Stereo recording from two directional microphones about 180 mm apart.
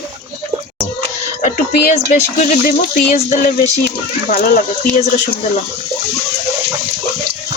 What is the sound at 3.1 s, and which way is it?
Music, 40° left (ahead or behind).